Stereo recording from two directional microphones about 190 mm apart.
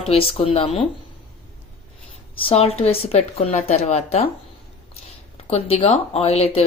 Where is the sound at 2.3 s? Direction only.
30° left (ahead or behind).